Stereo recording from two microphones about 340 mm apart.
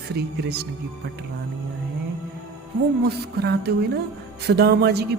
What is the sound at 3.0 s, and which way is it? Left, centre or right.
Speech, right.